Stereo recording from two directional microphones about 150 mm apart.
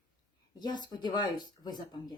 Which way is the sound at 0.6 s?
30° left (ahead or behind).